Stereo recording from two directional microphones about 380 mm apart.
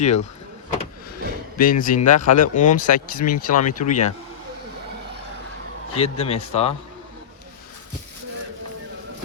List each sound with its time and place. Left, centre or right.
0.0 s speech: centre
1.2 s a sound: right
1.5 s speech: left
5.9 s speech: centre